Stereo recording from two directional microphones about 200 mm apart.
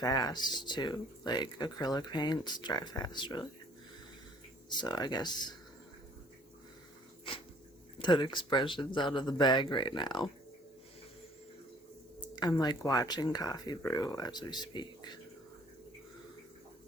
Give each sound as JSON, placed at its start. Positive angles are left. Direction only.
{"t": 0.0, "sound": "speech", "side_deg": 20}
{"t": 4.8, "sound": "speech", "side_deg": 20}
{"t": 7.9, "sound": "speech", "side_deg": 20}
{"t": 12.4, "sound": "speech", "side_deg": 20}